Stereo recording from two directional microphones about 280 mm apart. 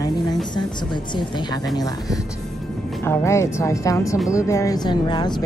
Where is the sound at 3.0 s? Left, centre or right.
Centre.